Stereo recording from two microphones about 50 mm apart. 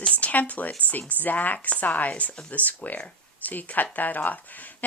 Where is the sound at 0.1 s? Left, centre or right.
Left.